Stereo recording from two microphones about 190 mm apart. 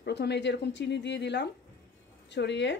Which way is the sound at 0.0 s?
60° left (ahead or behind).